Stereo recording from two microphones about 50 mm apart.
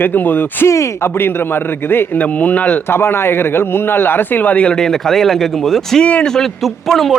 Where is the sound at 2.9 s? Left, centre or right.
Left.